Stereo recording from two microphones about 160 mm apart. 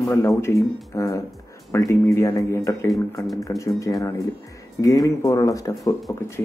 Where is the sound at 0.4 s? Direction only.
20° left (ahead or behind).